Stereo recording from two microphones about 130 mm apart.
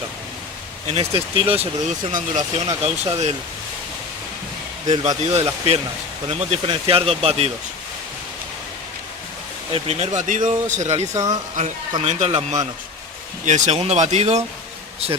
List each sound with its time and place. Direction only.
0.9 s speech: 50° right (ahead or behind)
2.1 s speech: 60° right (ahead or behind)
5.2 s speech: 55° right (ahead or behind)
6.2 s speech: 45° right (ahead or behind)
9.7 s speech: 55° right (ahead or behind)
10.2 s speech: 75° right (ahead or behind)
11.1 s speech: 25° right (ahead or behind)
11.5 s speech: 60° right (ahead or behind)
13.4 s speech: 65° right (ahead or behind)